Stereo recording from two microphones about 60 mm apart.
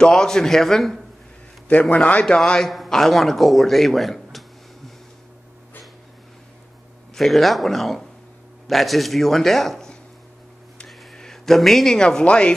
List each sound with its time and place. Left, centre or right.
0.0 s a man's voice: centre
1.7 s a man's voice: left
2.2 s a man's voice: centre
2.7 s a man's voice: centre
7.2 s speech: centre